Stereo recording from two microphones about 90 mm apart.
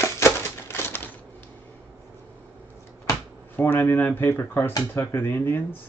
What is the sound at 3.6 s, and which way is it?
Speech, 25° left (ahead or behind).